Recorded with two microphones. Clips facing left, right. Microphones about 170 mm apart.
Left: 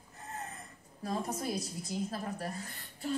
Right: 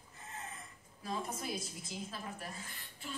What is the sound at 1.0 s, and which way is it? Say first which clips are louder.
A woman's voice: left 5 dB; 50° left (ahead or behind).